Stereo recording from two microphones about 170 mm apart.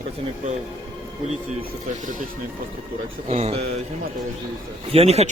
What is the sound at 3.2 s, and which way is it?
Speech, 40° right (ahead or behind).